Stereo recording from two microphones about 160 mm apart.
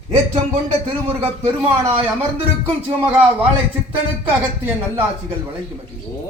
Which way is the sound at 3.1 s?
10° right (ahead or behind).